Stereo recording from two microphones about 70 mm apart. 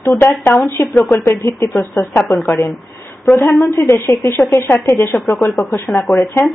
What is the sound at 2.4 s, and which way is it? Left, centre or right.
Speech, left.